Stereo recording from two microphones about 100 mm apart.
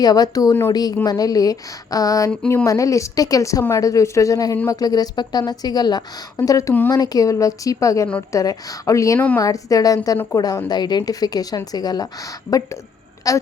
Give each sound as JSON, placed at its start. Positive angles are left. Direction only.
{"t": 0.0, "sound": "a woman's voice", "side_deg": 40}
{"t": 9.1, "sound": "a woman's voice", "side_deg": 15}
{"t": 9.4, "sound": "a woman's voice", "side_deg": 35}
{"t": 13.2, "sound": "a woman's voice", "side_deg": 35}